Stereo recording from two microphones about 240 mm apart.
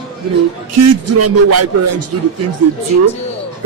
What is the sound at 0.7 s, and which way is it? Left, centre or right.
Speech, right.